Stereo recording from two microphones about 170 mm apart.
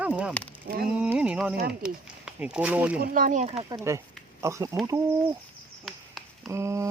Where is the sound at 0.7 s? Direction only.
65° right (ahead or behind).